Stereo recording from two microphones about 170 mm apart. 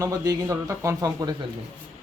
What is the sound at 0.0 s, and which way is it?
A man's voice, 20° right (ahead or behind).